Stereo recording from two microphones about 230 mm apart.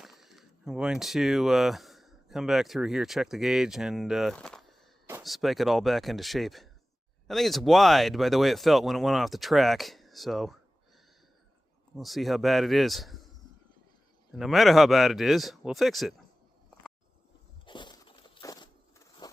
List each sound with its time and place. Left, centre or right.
0.0 s speech: centre
11.9 s speech: centre
14.3 s speech: centre
17.7 s a sound: centre